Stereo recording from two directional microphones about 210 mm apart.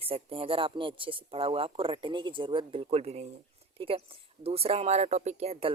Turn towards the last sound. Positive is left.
turn(degrees=-25)  # may be behind; listen again after turning